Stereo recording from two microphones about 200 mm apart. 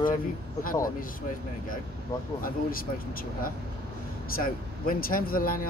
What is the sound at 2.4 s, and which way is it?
Speech, 45° left (ahead or behind).